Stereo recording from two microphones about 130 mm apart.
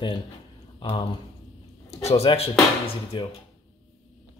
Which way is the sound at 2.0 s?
50° left (ahead or behind).